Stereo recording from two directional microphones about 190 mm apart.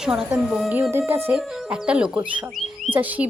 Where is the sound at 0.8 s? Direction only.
15° right (ahead or behind).